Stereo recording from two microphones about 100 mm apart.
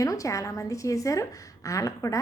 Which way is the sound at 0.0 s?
35° left (ahead or behind).